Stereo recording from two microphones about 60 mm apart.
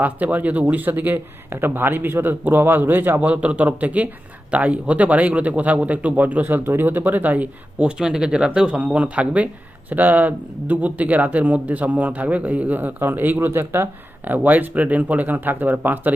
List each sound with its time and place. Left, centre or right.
0.0 s a man's voice: right